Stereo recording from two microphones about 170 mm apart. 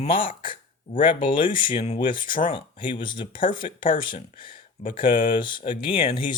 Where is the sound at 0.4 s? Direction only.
30° left (ahead or behind).